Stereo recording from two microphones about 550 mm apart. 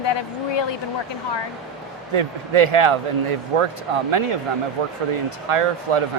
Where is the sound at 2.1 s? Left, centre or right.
Right.